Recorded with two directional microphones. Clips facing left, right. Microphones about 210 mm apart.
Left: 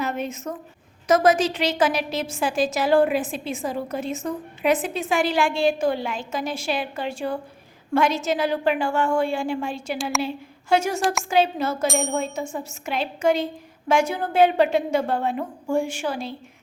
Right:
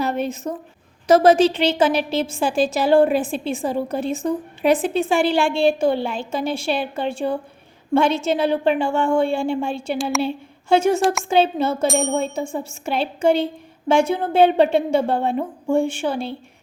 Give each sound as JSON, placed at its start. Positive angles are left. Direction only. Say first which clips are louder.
{"t": 0.0, "sound": "a woman's voice", "louder": "right 4 dB", "side_deg": -35}
{"t": 11.9, "sound": "ding", "louder": "right 4 dB", "side_deg": -30}
{"t": 12.5, "sound": "a woman's voice", "louder": "right 5 dB", "side_deg": -30}